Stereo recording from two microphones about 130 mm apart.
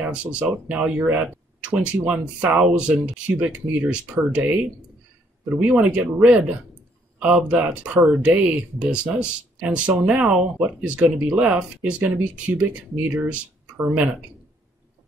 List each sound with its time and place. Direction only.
0.0 s speech: 10° right (ahead or behind)
5.5 s speech: 15° right (ahead or behind)